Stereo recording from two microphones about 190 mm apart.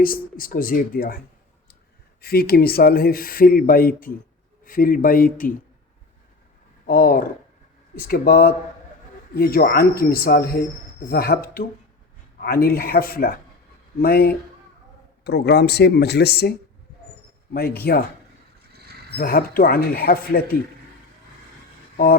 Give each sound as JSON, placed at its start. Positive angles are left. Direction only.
{"t": 0.0, "sound": "speech", "side_deg": 50}
{"t": 2.2, "sound": "speech", "side_deg": 55}
{"t": 6.8, "sound": "speech", "side_deg": 50}
{"t": 18.7, "sound": "a sound", "side_deg": -55}
{"t": 19.1, "sound": "speech", "side_deg": 50}